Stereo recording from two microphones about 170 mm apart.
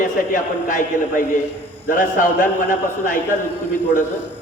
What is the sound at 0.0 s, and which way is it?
Speech, 50° left (ahead or behind).